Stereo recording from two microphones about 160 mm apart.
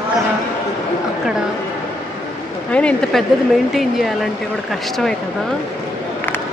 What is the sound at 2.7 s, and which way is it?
Speech, 5° left (ahead or behind).